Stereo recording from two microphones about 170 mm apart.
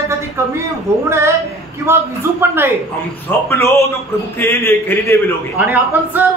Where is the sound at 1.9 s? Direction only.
15° right (ahead or behind).